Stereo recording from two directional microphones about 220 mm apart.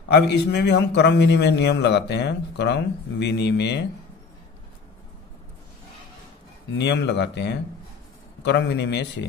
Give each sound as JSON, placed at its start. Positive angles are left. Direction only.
{"t": 0.1, "sound": "a man's voice", "side_deg": 50}
{"t": 6.8, "sound": "a man's voice", "side_deg": 50}